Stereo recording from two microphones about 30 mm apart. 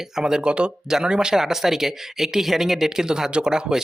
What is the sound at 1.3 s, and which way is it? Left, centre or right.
Speech, centre.